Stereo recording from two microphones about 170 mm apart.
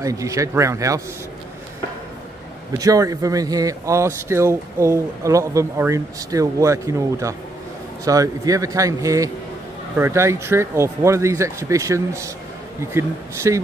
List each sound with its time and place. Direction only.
0.0 s a man's voice: 20° right (ahead or behind)
2.8 s a man's voice: 20° right (ahead or behind)